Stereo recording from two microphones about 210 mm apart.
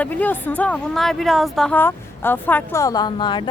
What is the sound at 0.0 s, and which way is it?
Speech, 10° left (ahead or behind).